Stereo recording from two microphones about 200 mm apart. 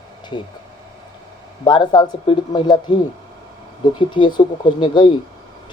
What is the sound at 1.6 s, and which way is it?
Speech, 20° left (ahead or behind).